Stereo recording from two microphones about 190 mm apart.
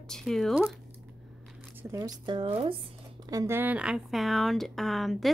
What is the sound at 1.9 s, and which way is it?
Speech, 20° right (ahead or behind).